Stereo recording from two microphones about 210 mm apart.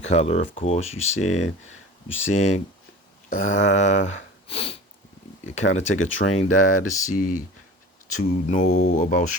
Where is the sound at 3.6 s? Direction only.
35° left (ahead or behind).